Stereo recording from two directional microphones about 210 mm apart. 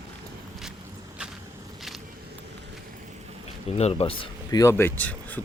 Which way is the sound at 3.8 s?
30° left (ahead or behind).